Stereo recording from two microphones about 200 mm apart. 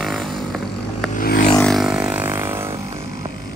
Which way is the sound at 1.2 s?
50° left (ahead or behind).